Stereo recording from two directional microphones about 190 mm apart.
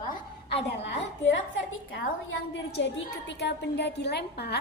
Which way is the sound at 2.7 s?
70° left (ahead or behind).